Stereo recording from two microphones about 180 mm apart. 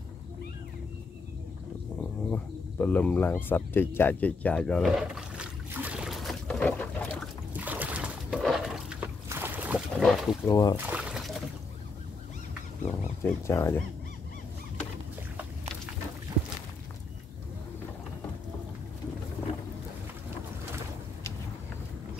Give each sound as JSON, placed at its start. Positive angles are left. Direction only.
{"t": 2.3, "sound": "cricket", "side_deg": 10}
{"t": 7.5, "sound": "a sound", "side_deg": -10}
{"t": 10.4, "sound": "speech", "side_deg": 20}
{"t": 10.9, "sound": "pour", "side_deg": -5}
{"t": 12.8, "sound": "speech", "side_deg": 15}